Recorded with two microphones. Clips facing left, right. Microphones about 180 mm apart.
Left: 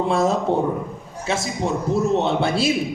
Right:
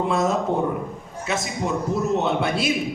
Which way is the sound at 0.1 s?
30° left (ahead or behind).